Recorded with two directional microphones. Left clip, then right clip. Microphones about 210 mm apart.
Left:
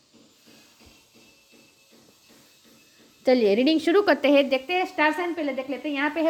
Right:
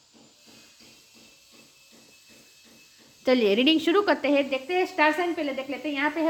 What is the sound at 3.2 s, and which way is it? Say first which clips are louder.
Speech: left 1 dB; 10° left (ahead or behind).